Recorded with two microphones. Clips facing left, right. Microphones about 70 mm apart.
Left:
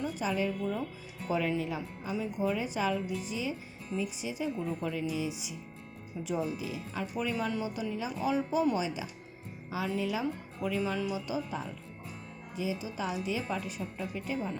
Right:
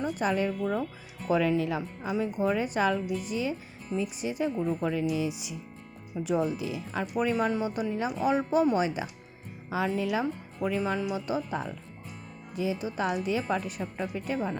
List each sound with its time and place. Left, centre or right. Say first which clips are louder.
0.0 s speech: right 4 dB; right
0.6 s speech: right 4 dB; right
1.3 s speech: right 5 dB; right